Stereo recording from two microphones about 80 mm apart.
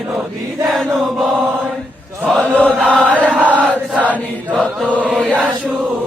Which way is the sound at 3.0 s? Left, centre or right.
Centre.